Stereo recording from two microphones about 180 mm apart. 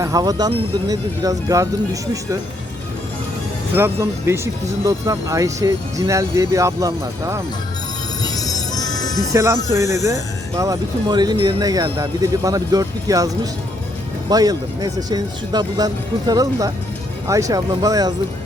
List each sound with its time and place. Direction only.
0.0 s speech: 20° right (ahead or behind)
3.8 s speech: 15° right (ahead or behind)
8.2 s music: 20° left (ahead or behind)
9.3 s speech: 15° right (ahead or behind)